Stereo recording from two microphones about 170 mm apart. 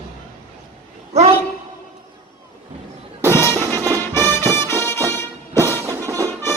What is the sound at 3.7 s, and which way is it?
Music, 20° right (ahead or behind).